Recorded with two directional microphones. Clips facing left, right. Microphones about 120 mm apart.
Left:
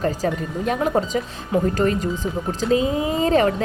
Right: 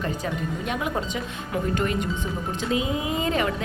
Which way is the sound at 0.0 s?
40° left (ahead or behind).